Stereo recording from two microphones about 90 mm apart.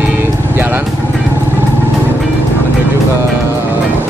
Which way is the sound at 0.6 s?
25° right (ahead or behind).